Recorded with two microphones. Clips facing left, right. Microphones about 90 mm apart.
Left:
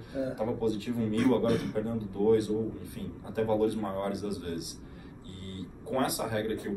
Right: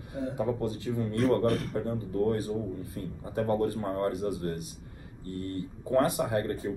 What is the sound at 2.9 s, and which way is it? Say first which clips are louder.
Speech: even; 30° right (ahead or behind).